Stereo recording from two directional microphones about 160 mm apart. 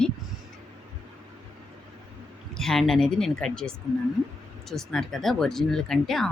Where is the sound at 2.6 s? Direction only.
Centre (ahead or behind).